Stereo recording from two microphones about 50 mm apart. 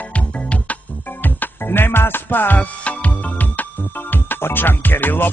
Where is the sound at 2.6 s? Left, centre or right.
Left.